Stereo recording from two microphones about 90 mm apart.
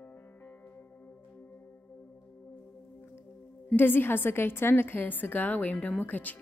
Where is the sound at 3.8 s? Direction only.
25° left (ahead or behind).